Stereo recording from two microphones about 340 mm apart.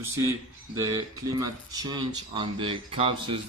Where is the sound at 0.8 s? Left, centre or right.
Centre.